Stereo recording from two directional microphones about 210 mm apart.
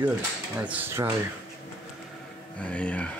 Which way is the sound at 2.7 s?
5° left (ahead or behind).